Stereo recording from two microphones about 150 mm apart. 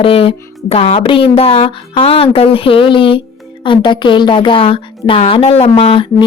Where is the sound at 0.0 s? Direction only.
40° left (ahead or behind).